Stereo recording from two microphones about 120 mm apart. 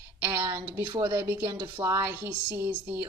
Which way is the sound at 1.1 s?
20° right (ahead or behind).